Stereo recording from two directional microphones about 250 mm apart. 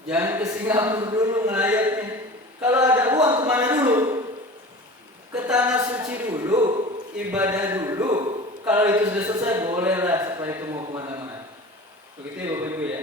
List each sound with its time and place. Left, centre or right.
0.1 s a man's voice: centre
5.3 s a sound: centre
7.3 s a man's voice: centre
12.5 s a man's voice: centre